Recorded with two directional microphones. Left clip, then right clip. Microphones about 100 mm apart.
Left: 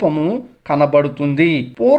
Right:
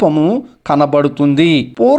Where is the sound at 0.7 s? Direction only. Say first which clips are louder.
Right 2 dB; 35° right (ahead or behind).